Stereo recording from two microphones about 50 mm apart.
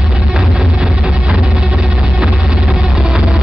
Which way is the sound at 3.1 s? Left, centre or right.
Centre.